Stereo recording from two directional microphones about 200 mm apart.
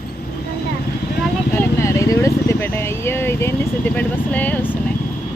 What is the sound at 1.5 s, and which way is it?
Vehicle, 15° left (ahead or behind).